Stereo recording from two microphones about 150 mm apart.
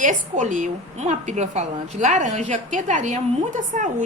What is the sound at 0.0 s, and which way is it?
A woman's voice, 55° right (ahead or behind).